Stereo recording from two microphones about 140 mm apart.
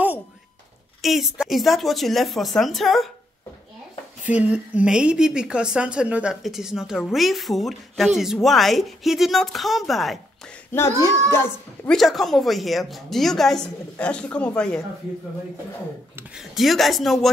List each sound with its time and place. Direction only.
1.0 s a woman's voice: centre (ahead or behind)
4.3 s a woman's voice: 10° right (ahead or behind)
10.7 s a child's voice: 20° left (ahead or behind)
11.9 s a woman's voice: centre (ahead or behind)
16.3 s a woman's voice: centre (ahead or behind)